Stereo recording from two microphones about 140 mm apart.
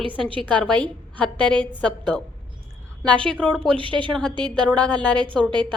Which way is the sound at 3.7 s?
35° right (ahead or behind).